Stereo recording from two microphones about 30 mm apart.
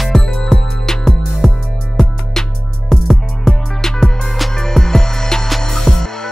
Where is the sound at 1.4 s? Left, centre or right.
Centre.